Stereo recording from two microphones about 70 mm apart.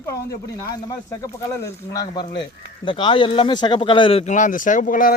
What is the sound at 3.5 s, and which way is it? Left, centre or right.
Speech, left.